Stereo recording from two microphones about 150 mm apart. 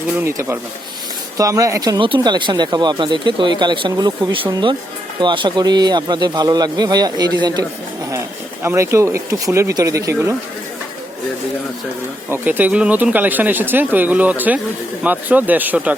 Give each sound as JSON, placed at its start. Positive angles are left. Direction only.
{"t": 0.2, "sound": "speech", "side_deg": -15}
{"t": 8.6, "sound": "speech", "side_deg": -15}
{"t": 12.3, "sound": "speech", "side_deg": -10}